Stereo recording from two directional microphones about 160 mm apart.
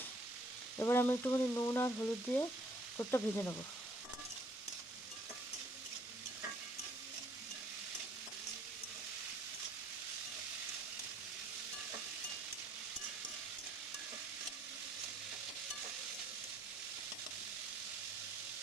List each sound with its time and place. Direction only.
0.8 s frying: 15° left (ahead or behind)